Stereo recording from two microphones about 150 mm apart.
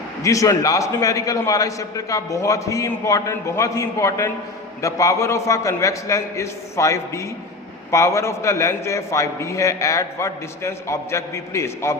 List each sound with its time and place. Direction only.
0.2 s a man's voice: 20° left (ahead or behind)